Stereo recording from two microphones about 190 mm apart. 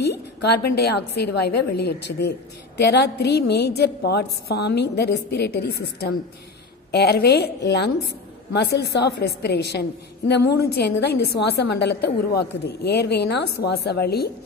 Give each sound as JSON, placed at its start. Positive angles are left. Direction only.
{"t": 0.4, "sound": "a woman's voice", "side_deg": 60}